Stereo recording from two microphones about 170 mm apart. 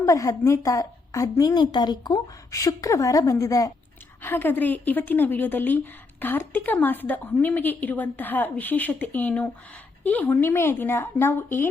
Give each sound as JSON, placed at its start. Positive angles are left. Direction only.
{"t": 0.0, "sound": "a woman's voice", "side_deg": 20}